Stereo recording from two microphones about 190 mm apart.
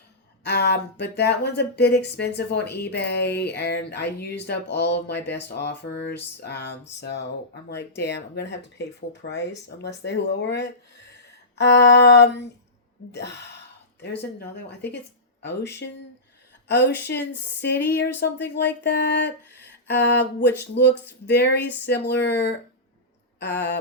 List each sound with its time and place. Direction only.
0.4 s speech: 60° left (ahead or behind)
14.3 s speech: 60° left (ahead or behind)
16.6 s speech: 65° left (ahead or behind)